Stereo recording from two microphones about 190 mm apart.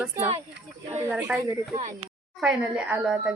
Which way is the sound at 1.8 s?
35° right (ahead or behind).